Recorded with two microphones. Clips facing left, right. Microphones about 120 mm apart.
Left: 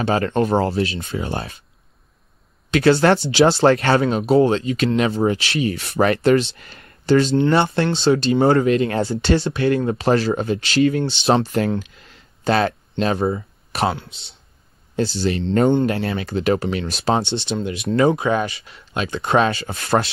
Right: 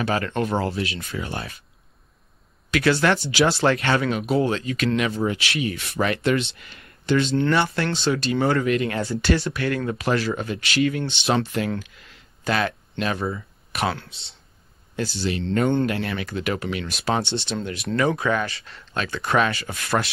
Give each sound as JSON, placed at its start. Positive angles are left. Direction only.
{"t": 0.0, "sound": "speech", "side_deg": 30}
{"t": 2.7, "sound": "speech", "side_deg": 30}
{"t": 7.3, "sound": "speech", "side_deg": 25}
{"t": 15.0, "sound": "speech", "side_deg": 30}